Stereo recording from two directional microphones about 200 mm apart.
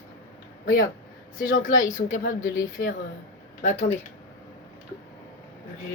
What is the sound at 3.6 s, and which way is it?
Speech, 35° left (ahead or behind).